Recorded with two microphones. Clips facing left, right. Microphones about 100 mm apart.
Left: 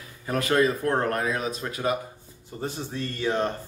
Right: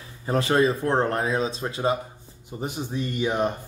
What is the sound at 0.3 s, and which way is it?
Speech, 25° right (ahead or behind).